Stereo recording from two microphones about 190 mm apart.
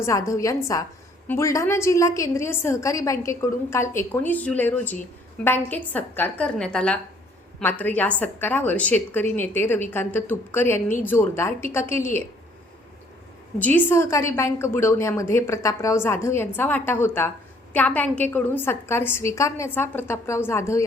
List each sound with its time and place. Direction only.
0.0 s a woman's voice: 15° left (ahead or behind)
13.6 s a woman's voice: 10° left (ahead or behind)